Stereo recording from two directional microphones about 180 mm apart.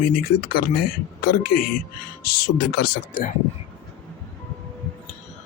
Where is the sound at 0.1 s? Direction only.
55° left (ahead or behind).